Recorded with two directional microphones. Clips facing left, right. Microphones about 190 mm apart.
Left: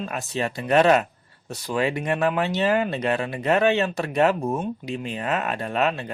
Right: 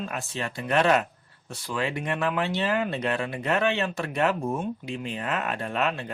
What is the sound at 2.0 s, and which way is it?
Speech, 45° left (ahead or behind).